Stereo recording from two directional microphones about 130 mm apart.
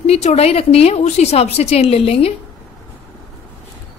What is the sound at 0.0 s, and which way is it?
A woman's voice, 55° left (ahead or behind).